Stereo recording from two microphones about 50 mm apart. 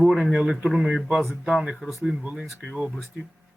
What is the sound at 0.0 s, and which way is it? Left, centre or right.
Speech, centre.